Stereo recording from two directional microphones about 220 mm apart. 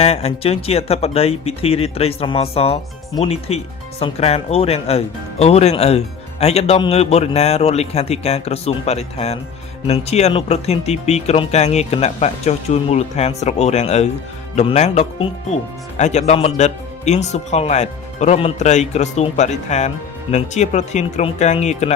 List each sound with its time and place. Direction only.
0.0 s speech: 30° left (ahead or behind)